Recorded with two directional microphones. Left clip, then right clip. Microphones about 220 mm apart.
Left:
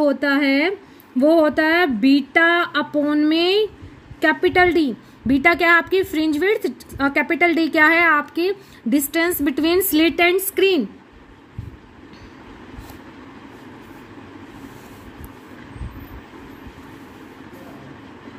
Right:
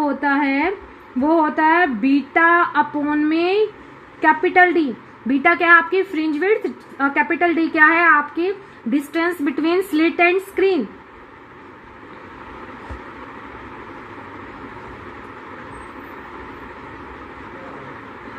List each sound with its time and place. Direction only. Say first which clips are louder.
0.0 s a woman's voice: left 1 dB; 60° left (ahead or behind)